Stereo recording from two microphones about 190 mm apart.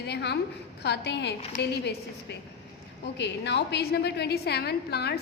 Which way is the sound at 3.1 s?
65° left (ahead or behind).